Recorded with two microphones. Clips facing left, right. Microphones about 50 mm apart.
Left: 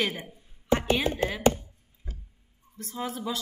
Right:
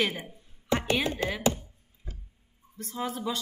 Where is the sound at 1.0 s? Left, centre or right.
Left.